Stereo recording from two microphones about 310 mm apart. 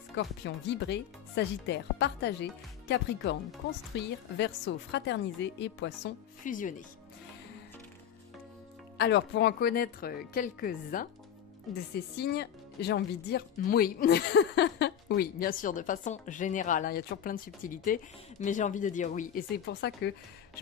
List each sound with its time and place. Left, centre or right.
0.1 s a woman's voice: left
3.9 s a woman's voice: left
8.9 s speech: left